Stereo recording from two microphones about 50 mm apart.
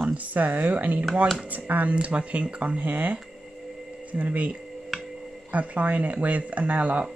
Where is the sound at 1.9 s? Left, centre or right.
Right.